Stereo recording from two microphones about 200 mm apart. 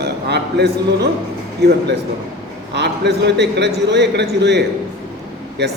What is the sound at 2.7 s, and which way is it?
A man's voice, 60° right (ahead or behind).